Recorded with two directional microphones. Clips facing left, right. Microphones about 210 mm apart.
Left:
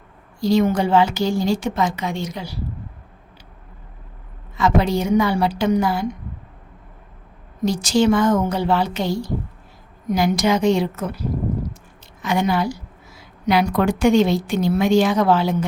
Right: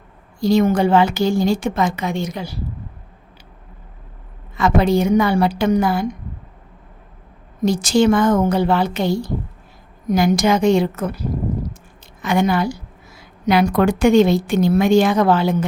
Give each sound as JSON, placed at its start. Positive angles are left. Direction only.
{"t": 0.4, "sound": "speech", "side_deg": -50}
{"t": 4.5, "sound": "speech", "side_deg": -55}
{"t": 7.6, "sound": "speech", "side_deg": -55}
{"t": 12.2, "sound": "speech", "side_deg": -50}